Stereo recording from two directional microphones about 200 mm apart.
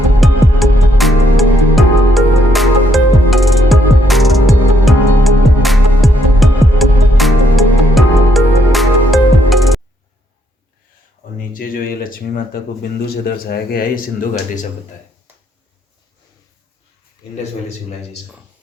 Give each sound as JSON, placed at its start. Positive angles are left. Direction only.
{"t": 0.2, "sound": "music", "side_deg": 0}
{"t": 11.5, "sound": "speech", "side_deg": 45}